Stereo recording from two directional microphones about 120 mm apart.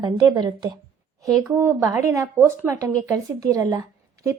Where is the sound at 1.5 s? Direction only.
25° right (ahead or behind).